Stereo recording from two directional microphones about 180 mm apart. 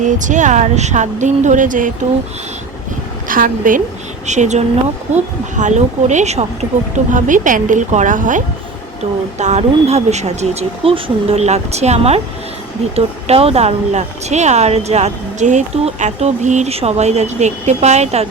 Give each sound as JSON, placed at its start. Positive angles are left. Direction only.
{"t": 0.0, "sound": "speech", "side_deg": -45}
{"t": 3.2, "sound": "a woman's voice", "side_deg": -50}
{"t": 13.2, "sound": "speech", "side_deg": -35}